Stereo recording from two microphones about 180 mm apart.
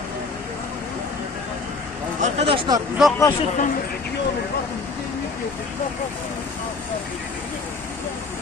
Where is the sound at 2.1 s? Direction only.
40° right (ahead or behind).